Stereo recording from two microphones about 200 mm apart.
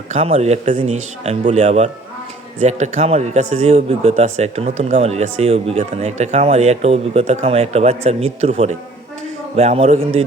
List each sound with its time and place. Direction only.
0.1 s speech: 30° right (ahead or behind)